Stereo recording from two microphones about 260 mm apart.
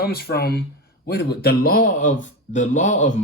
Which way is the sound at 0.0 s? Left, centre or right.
Left.